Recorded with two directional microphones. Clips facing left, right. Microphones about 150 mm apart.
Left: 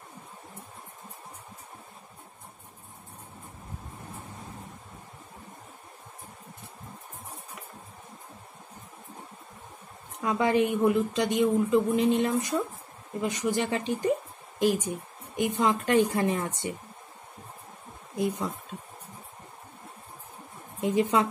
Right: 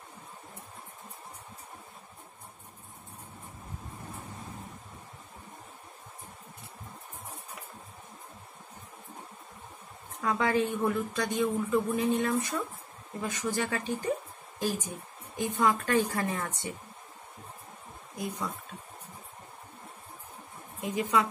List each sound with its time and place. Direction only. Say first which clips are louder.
10.2 s a woman's voice: left 3 dB; 20° left (ahead or behind)
15.3 s a woman's voice: left 2 dB; 20° left (ahead or behind)
18.1 s speech: left 7 dB; 25° left (ahead or behind)
20.8 s a woman's voice: left 4 dB; 25° left (ahead or behind)